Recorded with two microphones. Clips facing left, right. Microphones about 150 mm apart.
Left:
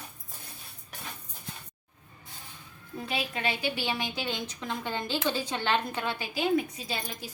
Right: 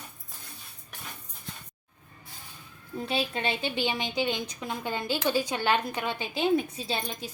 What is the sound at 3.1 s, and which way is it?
A woman's voice, 30° right (ahead or behind).